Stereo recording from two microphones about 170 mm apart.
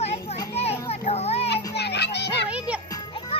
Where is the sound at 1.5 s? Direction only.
80° left.